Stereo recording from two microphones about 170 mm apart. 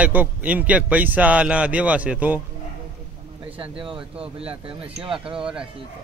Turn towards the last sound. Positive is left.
turn(degrees=-5)  # may be behind; listen again after turning